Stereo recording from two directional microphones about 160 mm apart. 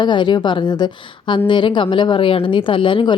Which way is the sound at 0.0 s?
30° left (ahead or behind).